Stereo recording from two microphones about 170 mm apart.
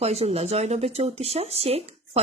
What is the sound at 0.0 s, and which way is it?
Speech, 40° right (ahead or behind).